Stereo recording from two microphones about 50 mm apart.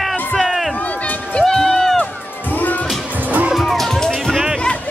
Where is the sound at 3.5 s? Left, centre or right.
Centre.